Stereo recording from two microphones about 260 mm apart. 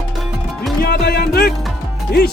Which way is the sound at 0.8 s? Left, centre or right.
Left.